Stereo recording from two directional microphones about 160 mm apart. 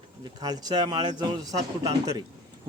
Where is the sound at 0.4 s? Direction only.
25° right (ahead or behind).